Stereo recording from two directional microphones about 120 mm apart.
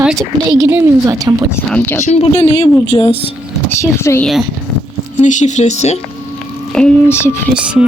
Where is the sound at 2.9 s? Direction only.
55° left (ahead or behind).